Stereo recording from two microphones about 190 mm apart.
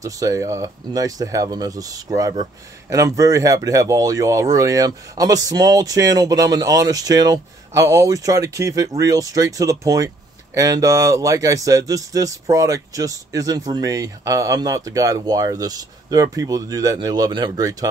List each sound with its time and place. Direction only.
0.0 s speech: 15° right (ahead or behind)